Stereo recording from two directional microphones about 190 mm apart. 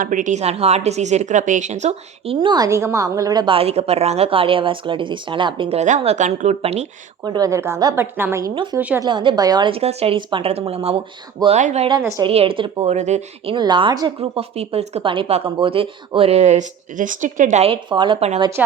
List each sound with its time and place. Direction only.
0.0 s a woman's voice: 45° right (ahead or behind)
7.3 s a woman's voice: 20° right (ahead or behind); by 11.9 s 35° right (ahead or behind)
11.9 s a woman's voice: 20° right (ahead or behind)
12.3 s a woman's voice: 30° right (ahead or behind)
13.6 s a woman's voice: 25° right (ahead or behind)